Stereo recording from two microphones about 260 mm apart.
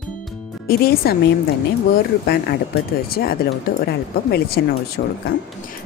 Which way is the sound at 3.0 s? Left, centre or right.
Left.